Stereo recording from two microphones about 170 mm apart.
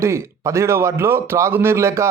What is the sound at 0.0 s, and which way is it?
A man's voice, 15° right (ahead or behind).